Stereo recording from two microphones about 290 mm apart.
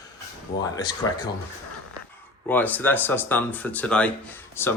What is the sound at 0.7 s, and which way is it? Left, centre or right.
Speech, centre.